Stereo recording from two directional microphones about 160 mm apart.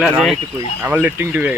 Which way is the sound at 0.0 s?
Centre (ahead or behind).